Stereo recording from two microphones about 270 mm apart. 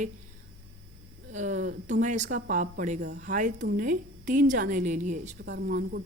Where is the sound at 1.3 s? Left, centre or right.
Right.